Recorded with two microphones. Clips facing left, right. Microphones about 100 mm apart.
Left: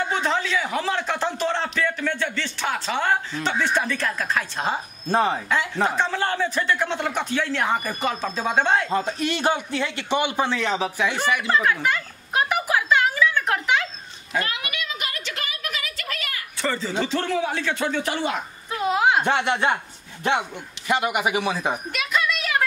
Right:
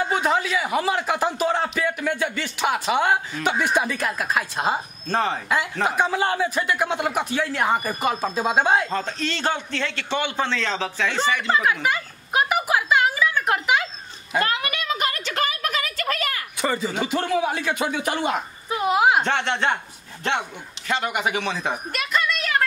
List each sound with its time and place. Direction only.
0.0 s a man's voice: 10° right (ahead or behind)
5.0 s a man's voice: 10° left (ahead or behind)
5.9 s a man's voice: 10° right (ahead or behind)
8.9 s a man's voice: 15° left (ahead or behind)
11.5 s a sound: 5° right (ahead or behind)
14.4 s a sound: 40° right (ahead or behind)
16.5 s a man's voice: 15° right (ahead or behind)
19.2 s a man's voice: 10° left (ahead or behind)